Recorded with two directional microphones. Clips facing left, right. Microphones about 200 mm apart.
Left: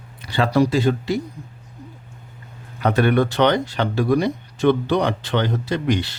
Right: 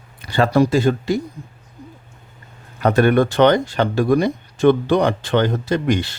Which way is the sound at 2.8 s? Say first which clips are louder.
Right 3 dB; 45° right (ahead or behind).